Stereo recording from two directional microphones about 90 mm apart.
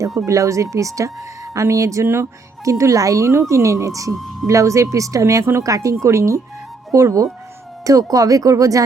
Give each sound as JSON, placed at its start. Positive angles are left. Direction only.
{"t": 0.3, "sound": "speech", "side_deg": -35}
{"t": 4.1, "sound": "speech", "side_deg": 0}
{"t": 4.4, "sound": "speech", "side_deg": -35}